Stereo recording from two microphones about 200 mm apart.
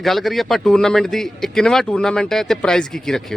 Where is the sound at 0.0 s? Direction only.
Centre (ahead or behind).